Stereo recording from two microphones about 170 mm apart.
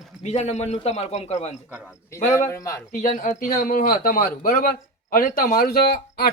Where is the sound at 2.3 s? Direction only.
20° left (ahead or behind).